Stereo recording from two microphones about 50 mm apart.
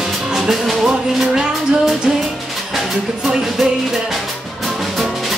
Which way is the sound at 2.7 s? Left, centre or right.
Centre.